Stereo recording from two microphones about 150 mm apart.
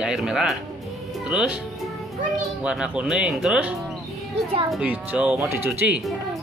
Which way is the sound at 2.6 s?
5° right (ahead or behind).